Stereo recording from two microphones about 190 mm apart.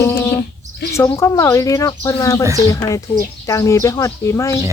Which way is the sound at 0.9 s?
15° left (ahead or behind).